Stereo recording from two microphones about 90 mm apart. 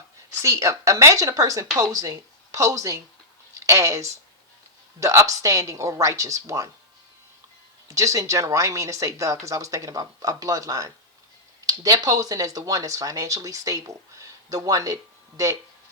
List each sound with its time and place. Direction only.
0.4 s speech: 35° right (ahead or behind)
7.9 s speech: 35° right (ahead or behind)